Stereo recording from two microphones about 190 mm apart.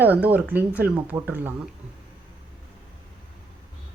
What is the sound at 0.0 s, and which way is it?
Speech, 10° right (ahead or behind).